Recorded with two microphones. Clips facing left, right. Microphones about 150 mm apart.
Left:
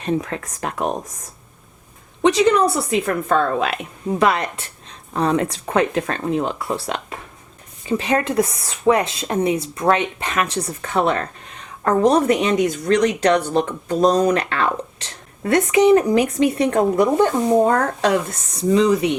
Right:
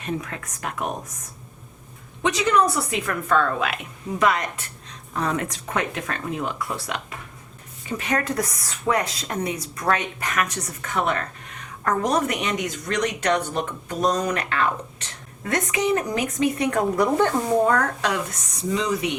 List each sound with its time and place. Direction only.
0.0 s speech: 30° left (ahead or behind)
2.2 s a woman's voice: 30° left (ahead or behind)